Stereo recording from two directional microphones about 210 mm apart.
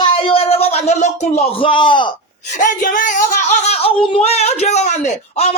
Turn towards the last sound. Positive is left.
turn(degrees=30)  # may be behind; listen again after turning